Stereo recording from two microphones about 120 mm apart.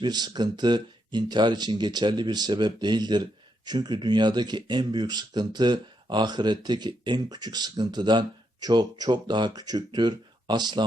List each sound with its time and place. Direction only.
0.0 s speech: 35° right (ahead or behind)